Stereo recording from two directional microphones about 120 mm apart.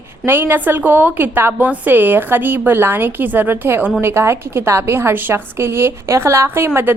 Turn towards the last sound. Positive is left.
turn(degrees=-20)  # may be behind; listen again after turning